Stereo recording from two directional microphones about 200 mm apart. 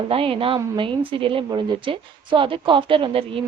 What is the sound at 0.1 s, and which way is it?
A woman's voice, 25° right (ahead or behind).